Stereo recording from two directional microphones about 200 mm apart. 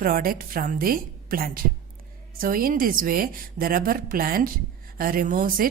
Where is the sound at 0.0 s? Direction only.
45° right (ahead or behind).